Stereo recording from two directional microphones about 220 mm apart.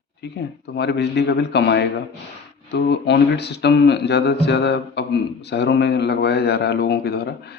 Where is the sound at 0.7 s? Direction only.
50° left (ahead or behind).